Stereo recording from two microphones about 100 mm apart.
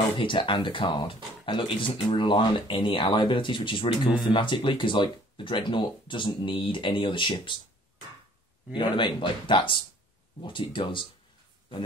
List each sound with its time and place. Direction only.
0.2 s speech: 55° left (ahead or behind)
8.7 s speech: 55° left (ahead or behind)